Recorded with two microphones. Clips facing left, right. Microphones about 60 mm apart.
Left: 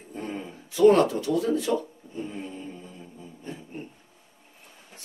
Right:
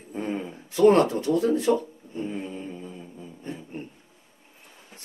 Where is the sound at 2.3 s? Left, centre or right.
Right.